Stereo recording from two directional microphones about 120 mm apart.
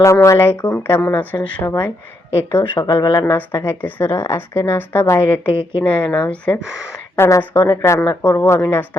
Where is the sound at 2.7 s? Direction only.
30° left (ahead or behind).